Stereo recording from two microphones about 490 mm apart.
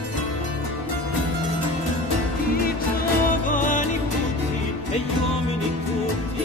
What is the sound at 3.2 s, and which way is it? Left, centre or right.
Music, centre.